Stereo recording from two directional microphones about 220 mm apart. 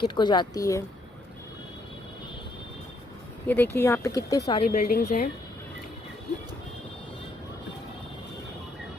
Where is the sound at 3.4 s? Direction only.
10° left (ahead or behind).